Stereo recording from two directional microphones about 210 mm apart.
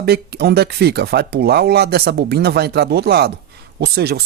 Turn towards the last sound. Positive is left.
turn(degrees=-50)  # may be behind; listen again after turning